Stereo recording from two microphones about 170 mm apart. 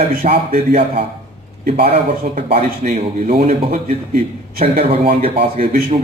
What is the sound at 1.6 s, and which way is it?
Speech, 35° right (ahead or behind).